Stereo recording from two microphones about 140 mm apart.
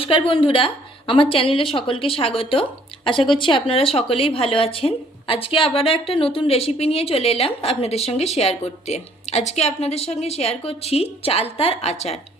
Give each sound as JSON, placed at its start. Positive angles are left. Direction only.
{"t": 0.0, "sound": "speech", "side_deg": 40}